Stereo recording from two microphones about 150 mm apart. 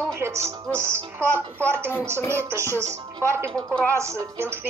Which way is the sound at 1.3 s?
10° left (ahead or behind).